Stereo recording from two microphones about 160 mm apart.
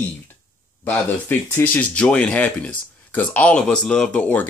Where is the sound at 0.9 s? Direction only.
15° left (ahead or behind).